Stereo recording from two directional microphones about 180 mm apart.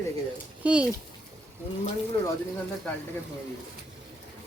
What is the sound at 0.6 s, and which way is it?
Speech, 5° right (ahead or behind).